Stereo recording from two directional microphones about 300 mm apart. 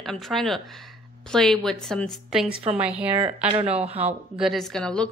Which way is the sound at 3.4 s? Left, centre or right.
Centre.